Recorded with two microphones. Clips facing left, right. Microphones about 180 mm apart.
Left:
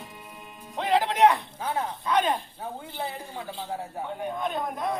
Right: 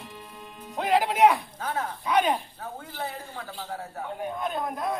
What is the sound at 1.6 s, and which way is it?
Speech, 10° left (ahead or behind).